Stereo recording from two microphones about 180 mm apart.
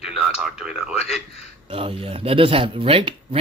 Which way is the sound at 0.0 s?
Centre (ahead or behind).